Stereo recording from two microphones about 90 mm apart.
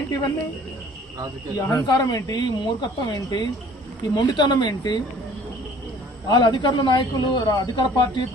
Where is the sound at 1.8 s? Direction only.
50° left (ahead or behind).